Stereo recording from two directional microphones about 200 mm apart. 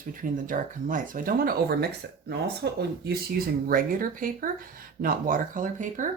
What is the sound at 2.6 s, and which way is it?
Speech, 60° right (ahead or behind).